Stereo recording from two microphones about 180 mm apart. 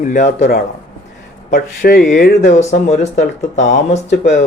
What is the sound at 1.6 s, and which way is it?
Speech, 60° left (ahead or behind).